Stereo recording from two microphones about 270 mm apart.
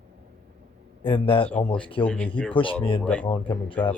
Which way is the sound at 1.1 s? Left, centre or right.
Centre.